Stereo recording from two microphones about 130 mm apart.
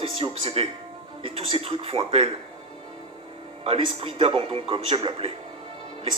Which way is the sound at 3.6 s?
50° right (ahead or behind).